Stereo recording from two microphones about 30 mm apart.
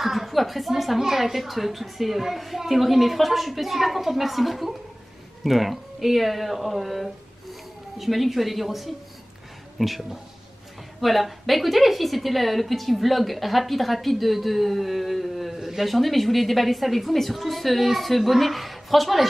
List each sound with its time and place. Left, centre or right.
0.0 s a sound: centre
1.0 s a woman's voice: centre
15.9 s a woman's voice: centre